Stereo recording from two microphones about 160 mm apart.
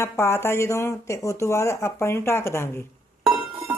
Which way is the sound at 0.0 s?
15° left (ahead or behind).